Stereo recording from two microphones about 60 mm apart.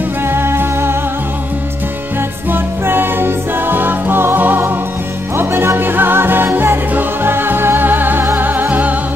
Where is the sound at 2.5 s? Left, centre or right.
Right.